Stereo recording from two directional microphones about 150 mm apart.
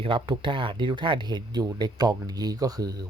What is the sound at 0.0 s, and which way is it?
Speech, 35° right (ahead or behind).